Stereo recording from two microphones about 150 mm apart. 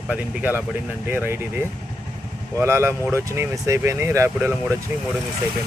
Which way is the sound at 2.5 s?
15° right (ahead or behind).